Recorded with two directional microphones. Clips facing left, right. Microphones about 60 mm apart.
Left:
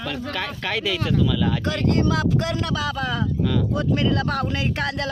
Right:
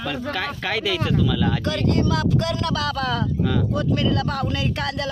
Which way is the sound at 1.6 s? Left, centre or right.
Left.